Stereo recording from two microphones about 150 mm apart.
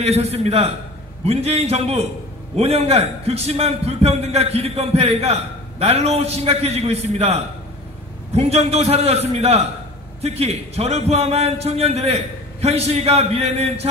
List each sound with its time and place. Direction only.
0.0 s a man's voice: 45° right (ahead or behind)
8.4 s a man's voice: 45° right (ahead or behind)